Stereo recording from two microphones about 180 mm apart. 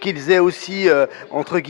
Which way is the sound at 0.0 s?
10° left (ahead or behind).